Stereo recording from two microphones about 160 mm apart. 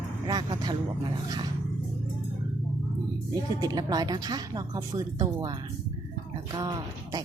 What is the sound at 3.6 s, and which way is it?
A woman's voice, 25° right (ahead or behind).